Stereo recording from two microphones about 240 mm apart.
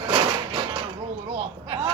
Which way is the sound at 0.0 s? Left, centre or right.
Centre.